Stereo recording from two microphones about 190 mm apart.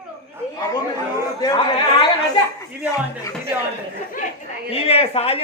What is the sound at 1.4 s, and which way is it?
Speech, 20° left (ahead or behind).